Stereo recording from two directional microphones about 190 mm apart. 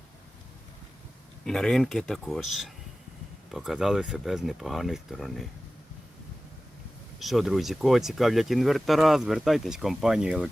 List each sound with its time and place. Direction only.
1.5 s speech: 5° left (ahead or behind)
7.2 s speech: centre (ahead or behind)